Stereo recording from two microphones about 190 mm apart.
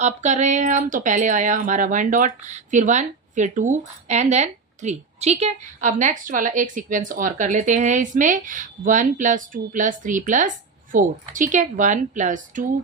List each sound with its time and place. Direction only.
0.0 s speech: 40° right (ahead or behind)